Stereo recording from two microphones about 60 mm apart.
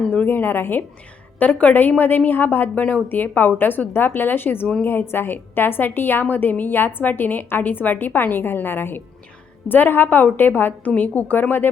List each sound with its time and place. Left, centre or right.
0.3 s a woman's voice: left